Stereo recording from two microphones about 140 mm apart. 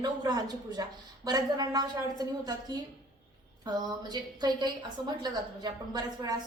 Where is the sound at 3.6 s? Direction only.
30° right (ahead or behind).